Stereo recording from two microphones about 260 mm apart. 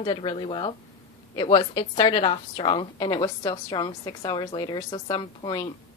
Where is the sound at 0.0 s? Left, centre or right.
Centre.